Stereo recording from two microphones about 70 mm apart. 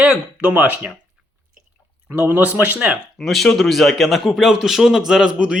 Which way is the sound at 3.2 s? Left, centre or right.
Centre.